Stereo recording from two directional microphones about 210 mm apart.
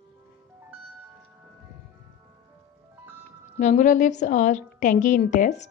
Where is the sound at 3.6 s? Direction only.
35° left (ahead or behind).